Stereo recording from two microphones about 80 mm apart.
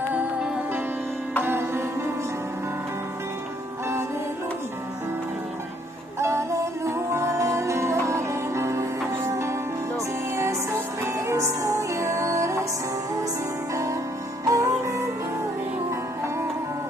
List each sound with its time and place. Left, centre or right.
0.1 s music: centre
6.1 s music: right
14.4 s music: right